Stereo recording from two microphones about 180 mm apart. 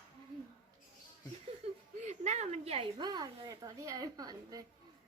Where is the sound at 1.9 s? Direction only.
40° right (ahead or behind); by 4.7 s 20° right (ahead or behind).